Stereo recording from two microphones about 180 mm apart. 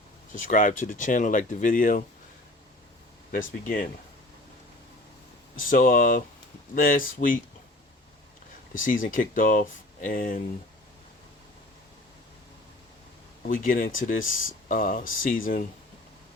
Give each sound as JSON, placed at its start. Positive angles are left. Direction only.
{"t": 0.3, "sound": "speech", "side_deg": 45}
{"t": 3.3, "sound": "speech", "side_deg": 50}
{"t": 5.5, "sound": "speech", "side_deg": 50}
{"t": 9.0, "sound": "speech", "side_deg": 50}
{"t": 13.5, "sound": "speech", "side_deg": 50}